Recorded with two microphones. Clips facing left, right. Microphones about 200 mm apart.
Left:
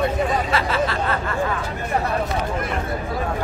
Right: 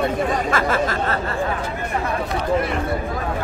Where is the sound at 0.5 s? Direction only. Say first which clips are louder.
Right 1 dB; 45° right (ahead or behind).